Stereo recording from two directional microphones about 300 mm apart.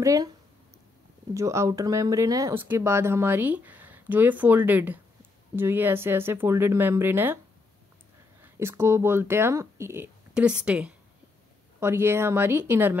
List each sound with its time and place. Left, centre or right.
0.0 s speech: centre
1.3 s speech: centre
8.4 s speech: centre